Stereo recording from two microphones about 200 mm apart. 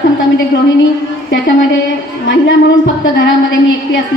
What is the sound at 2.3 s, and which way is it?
A woman's voice, 65° left (ahead or behind).